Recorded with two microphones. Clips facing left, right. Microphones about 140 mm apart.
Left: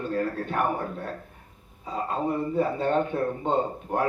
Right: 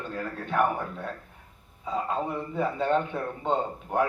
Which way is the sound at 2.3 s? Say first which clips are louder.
Left 4 dB; 40° left (ahead or behind).